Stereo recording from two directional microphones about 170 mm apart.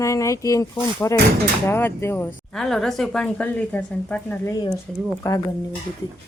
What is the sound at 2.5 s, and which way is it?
Speech, 5° left (ahead or behind).